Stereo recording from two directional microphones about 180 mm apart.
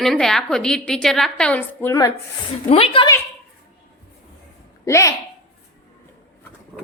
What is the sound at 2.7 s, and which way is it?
Speech, 30° left (ahead or behind).